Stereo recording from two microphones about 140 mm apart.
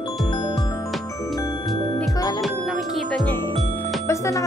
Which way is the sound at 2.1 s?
25° left (ahead or behind).